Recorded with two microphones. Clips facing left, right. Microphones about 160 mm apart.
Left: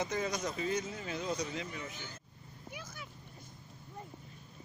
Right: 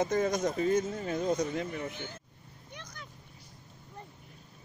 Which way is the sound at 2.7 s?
5° left (ahead or behind).